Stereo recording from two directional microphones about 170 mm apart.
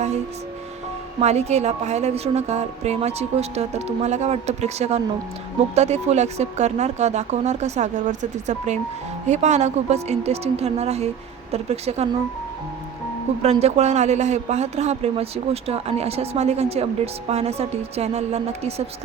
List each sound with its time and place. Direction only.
1.2 s a man's voice: 40° right (ahead or behind)
13.4 s a man's voice: 40° right (ahead or behind)